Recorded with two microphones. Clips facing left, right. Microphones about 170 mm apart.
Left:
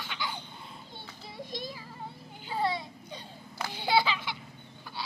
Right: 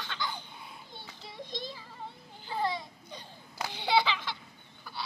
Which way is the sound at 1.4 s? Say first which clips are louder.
Left 1 dB; 20° right (ahead or behind).